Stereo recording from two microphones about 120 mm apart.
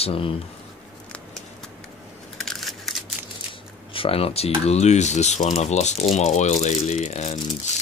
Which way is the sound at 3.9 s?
50° left (ahead or behind).